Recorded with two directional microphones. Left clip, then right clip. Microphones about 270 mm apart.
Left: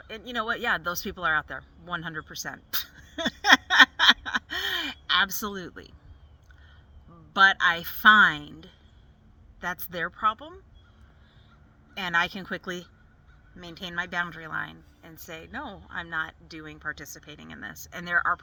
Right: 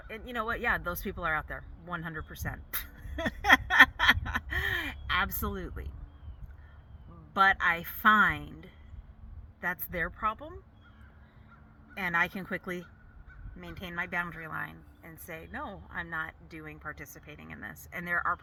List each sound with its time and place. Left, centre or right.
0.1 s speech: centre
3.7 s a sound: centre
7.3 s speech: centre
9.6 s speech: centre
11.9 s speech: centre